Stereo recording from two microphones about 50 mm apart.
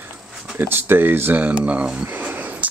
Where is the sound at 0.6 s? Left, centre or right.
Right.